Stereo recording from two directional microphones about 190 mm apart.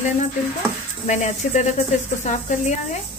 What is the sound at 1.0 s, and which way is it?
Speech, 40° left (ahead or behind).